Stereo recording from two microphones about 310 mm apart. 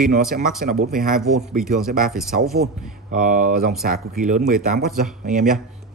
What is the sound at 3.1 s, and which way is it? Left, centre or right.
Speech, right.